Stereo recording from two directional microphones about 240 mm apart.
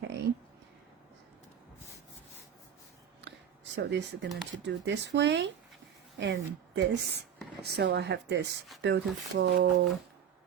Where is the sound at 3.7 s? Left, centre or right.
Right.